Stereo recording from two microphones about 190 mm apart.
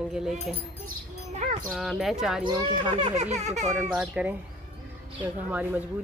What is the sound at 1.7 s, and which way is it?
Speech, centre (ahead or behind).